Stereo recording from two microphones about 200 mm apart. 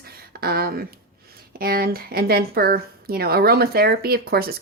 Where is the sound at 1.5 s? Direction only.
50° right (ahead or behind).